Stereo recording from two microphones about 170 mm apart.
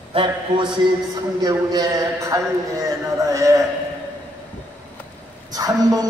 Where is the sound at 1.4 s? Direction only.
25° right (ahead or behind).